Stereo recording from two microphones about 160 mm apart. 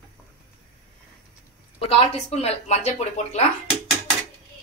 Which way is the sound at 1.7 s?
40° left (ahead or behind).